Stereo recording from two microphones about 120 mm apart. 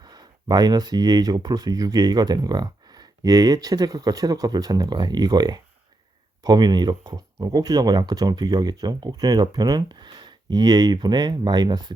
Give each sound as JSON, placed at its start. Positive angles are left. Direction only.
{"t": 0.0, "sound": "speech", "side_deg": -35}